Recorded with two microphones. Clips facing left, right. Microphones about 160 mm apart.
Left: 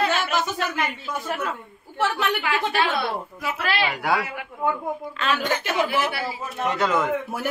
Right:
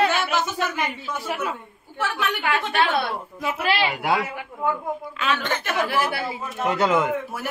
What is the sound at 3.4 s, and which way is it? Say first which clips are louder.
Speech: right 3 dB; 15° right (ahead or behind).